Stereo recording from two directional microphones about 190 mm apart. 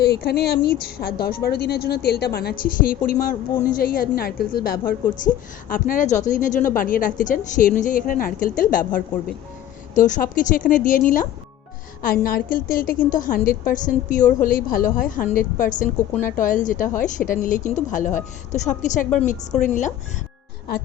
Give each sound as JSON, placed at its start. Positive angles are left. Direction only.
{"t": 0.0, "sound": "a woman's voice", "side_deg": 55}